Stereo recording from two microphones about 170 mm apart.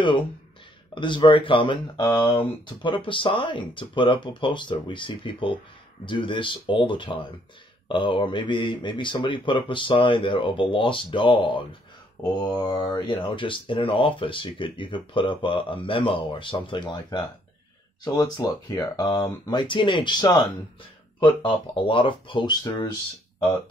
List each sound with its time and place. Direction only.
0.9 s speech: 30° left (ahead or behind)
12.2 s mantra: 10° left (ahead or behind)
12.5 s speech: 25° left (ahead or behind)